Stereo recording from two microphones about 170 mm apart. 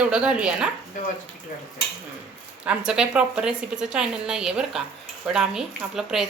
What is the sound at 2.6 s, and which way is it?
A woman's voice, 5° right (ahead or behind).